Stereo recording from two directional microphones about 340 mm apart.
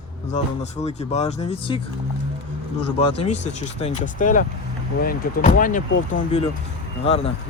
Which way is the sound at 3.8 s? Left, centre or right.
Left.